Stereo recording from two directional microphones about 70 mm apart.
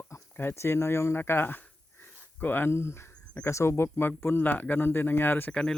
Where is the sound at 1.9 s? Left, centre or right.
Left.